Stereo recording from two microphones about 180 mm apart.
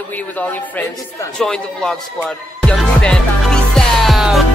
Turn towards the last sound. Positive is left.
turn(degrees=0)  # may be behind; listen again after turning